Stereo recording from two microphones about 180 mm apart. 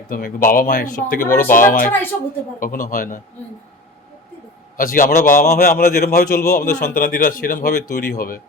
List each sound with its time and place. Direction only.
0.1 s speech: 50° left (ahead or behind)
4.8 s a man's voice: 50° left (ahead or behind)